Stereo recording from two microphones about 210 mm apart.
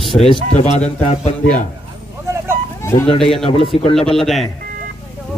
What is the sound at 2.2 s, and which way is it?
Vehicle, 15° right (ahead or behind).